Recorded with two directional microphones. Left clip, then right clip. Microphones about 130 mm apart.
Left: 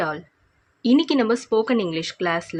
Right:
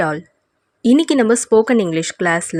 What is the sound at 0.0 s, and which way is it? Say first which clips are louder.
Speech: right 6 dB; 70° right (ahead or behind).